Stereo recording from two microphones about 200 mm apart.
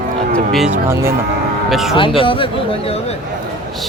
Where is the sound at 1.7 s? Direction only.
Centre (ahead or behind).